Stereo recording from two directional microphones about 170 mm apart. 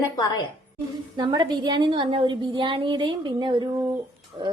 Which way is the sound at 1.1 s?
25° right (ahead or behind).